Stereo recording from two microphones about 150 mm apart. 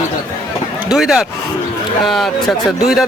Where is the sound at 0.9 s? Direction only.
Centre (ahead or behind).